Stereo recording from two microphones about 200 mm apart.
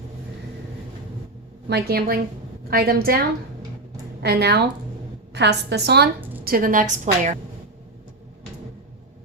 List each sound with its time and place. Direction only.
1.6 s a woman's voice: 55° right (ahead or behind)
4.2 s a woman's voice: 55° right (ahead or behind)
6.1 s a sound: 10° right (ahead or behind)
6.4 s a woman's voice: 45° right (ahead or behind)